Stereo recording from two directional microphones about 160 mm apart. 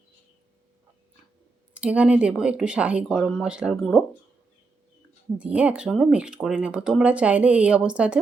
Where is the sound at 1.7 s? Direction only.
10° right (ahead or behind).